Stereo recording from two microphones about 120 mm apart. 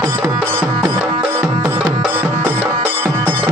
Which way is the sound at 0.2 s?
15° right (ahead or behind).